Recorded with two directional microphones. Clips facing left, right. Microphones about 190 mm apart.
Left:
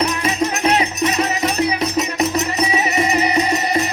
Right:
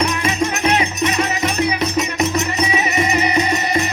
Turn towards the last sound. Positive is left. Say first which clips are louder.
# even
turn(degrees=35)  # may be behind; listen again after turning